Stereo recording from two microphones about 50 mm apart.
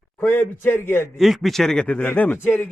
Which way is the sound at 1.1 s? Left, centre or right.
Centre.